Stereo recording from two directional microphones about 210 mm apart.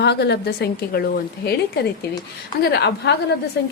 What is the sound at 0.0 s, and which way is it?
A woman's voice, 55° left (ahead or behind).